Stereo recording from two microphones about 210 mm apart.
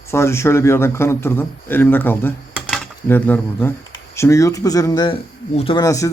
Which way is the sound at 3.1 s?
10° left (ahead or behind).